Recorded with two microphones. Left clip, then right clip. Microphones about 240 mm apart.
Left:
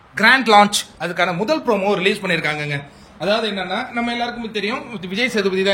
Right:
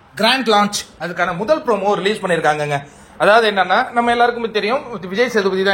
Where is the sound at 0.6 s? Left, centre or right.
Centre.